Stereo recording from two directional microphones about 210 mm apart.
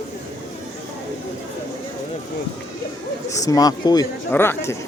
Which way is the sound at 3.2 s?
15° left (ahead or behind).